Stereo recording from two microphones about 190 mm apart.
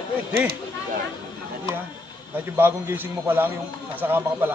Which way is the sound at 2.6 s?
10° right (ahead or behind).